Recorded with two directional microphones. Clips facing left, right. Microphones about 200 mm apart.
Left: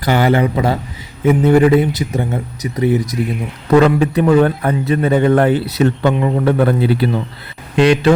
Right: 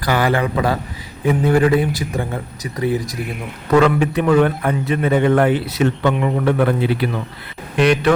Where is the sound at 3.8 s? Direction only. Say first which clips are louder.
Left 3 dB; 35° left (ahead or behind).